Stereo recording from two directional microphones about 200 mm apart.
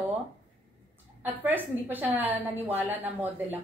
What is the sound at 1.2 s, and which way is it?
A woman's voice, 10° right (ahead or behind).